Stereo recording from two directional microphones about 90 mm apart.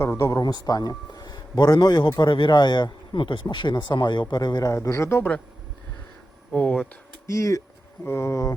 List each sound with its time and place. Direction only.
0.2 s a man's voice: 40° left (ahead or behind)
2.1 s speech: 60° left (ahead or behind)
4.7 s speech: 35° left (ahead or behind)
6.5 s speech: 10° left (ahead or behind)
7.3 s speech: 35° left (ahead or behind)